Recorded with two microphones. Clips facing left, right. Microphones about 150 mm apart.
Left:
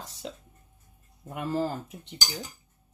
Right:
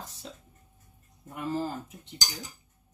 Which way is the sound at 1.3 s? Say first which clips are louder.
Left 2 dB; 65° left (ahead or behind).